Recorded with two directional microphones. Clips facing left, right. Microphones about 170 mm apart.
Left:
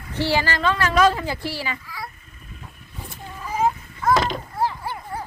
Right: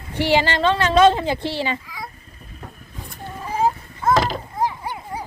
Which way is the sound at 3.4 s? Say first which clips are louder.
Right 1 dB; 30° right (ahead or behind).